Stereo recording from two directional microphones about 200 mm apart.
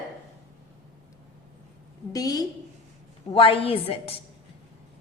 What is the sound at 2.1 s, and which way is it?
A woman's voice, 20° left (ahead or behind).